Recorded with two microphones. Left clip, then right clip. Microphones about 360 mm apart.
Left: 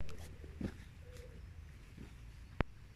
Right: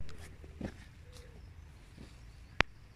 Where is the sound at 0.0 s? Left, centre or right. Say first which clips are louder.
Even; centre.